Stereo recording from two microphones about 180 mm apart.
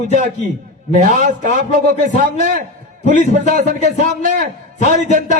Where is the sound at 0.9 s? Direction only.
45° right (ahead or behind).